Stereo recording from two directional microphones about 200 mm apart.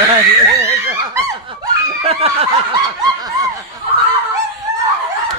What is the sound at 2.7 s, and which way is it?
Snicker, 15° right (ahead or behind).